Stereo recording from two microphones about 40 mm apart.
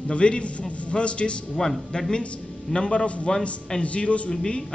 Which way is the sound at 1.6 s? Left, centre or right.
Centre.